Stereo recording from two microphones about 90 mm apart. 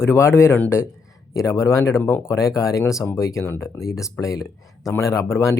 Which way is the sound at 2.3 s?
40° left (ahead or behind).